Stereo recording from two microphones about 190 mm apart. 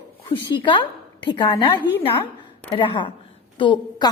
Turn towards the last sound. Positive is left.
turn(degrees=25)  # may be behind; listen again after turning